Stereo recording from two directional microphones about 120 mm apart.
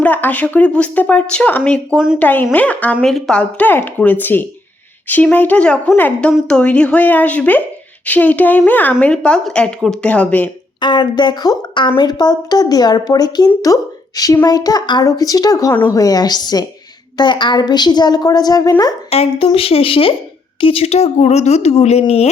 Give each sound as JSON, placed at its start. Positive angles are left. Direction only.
{"t": 0.0, "sound": "a woman's voice", "side_deg": 15}
{"t": 10.8, "sound": "a woman's voice", "side_deg": 40}
{"t": 19.1, "sound": "speech", "side_deg": 60}